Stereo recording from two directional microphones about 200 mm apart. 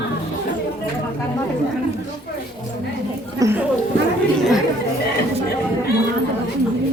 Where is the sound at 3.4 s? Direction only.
15° right (ahead or behind).